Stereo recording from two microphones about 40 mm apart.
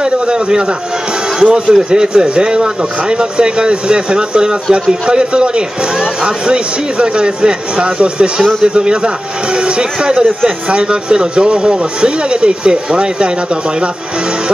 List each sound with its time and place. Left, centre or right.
0.0 s a man's voice: centre